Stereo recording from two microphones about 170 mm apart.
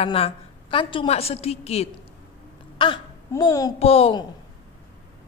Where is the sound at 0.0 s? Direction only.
35° left (ahead or behind).